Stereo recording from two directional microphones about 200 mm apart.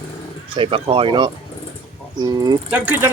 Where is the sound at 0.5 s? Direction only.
25° right (ahead or behind).